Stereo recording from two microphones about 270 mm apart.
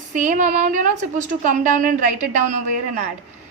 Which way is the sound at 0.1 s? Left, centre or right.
Right.